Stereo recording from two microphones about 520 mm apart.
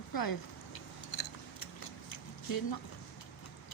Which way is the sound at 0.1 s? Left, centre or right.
Left.